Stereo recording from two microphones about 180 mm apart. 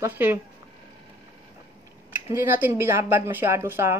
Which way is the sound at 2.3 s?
10° right (ahead or behind).